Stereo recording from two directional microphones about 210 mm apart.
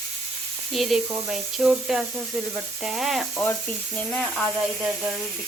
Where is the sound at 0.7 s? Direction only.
Centre (ahead or behind).